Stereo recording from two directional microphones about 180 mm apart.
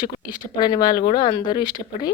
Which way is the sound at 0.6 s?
25° left (ahead or behind).